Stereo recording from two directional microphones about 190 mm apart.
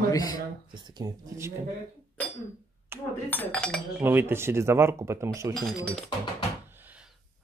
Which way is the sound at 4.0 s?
10° right (ahead or behind).